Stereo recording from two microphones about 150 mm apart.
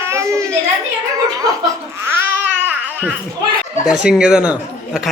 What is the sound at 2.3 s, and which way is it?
Babbling, 10° right (ahead or behind).